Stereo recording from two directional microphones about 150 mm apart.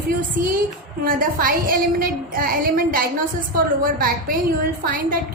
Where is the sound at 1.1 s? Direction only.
70° right (ahead or behind).